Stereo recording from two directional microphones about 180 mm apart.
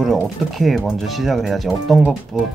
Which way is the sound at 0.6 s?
Centre (ahead or behind).